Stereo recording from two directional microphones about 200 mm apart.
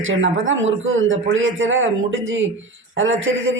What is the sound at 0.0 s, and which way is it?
Speech, 75° right (ahead or behind).